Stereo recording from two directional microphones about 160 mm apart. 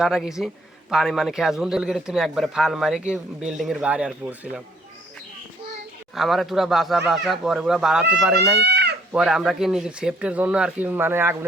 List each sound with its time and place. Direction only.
0.0 s a man's voice: centre (ahead or behind)
6.1 s a man's voice: centre (ahead or behind)
8.5 s cat: 90° right
9.1 s a man's voice: 5° right (ahead or behind)